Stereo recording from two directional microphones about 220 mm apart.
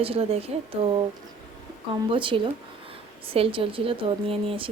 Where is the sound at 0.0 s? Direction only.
25° right (ahead or behind).